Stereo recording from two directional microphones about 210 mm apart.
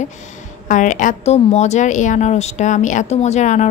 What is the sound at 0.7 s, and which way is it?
A woman's voice, 35° left (ahead or behind).